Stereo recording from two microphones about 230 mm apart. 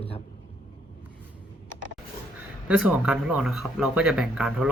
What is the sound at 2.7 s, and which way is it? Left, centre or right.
Speech, centre.